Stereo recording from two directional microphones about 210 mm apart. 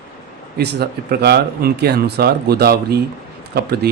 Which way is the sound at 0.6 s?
50° right (ahead or behind).